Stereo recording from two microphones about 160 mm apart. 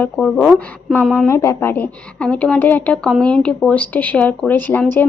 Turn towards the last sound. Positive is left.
turn(degrees=10)  # may be behind; listen again after turning